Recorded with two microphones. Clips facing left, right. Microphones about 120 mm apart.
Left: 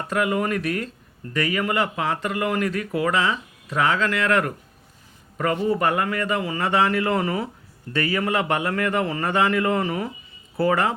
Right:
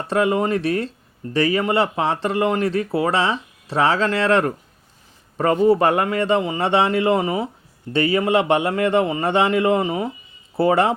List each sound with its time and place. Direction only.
0.1 s speech: 30° right (ahead or behind)